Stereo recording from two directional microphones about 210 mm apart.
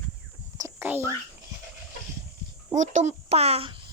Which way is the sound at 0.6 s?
10° right (ahead or behind).